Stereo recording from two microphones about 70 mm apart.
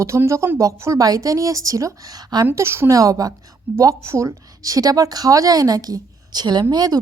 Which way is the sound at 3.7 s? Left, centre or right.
Right.